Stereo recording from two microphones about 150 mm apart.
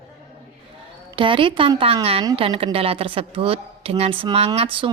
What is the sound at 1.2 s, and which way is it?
A woman's voice, 35° right (ahead or behind).